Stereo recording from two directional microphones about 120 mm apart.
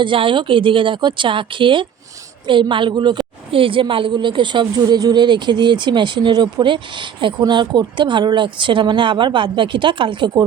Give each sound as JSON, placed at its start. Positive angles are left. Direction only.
{"t": 0.0, "sound": "a woman's voice", "side_deg": -45}